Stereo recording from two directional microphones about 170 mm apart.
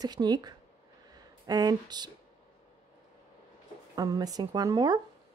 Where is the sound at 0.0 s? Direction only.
25° right (ahead or behind).